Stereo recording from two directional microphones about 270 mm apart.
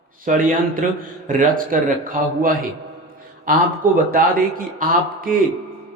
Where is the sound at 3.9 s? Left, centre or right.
Right.